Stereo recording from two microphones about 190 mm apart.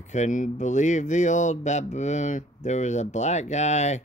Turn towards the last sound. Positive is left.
turn(degrees=35)  # may be behind; listen again after turning